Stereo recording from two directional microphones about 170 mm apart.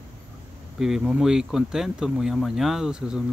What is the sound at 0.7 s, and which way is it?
Speech, 5° right (ahead or behind).